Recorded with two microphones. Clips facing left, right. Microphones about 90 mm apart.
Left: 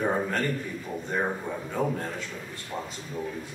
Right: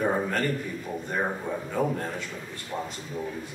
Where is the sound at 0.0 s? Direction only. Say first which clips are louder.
Right 1 dB; 5° right (ahead or behind).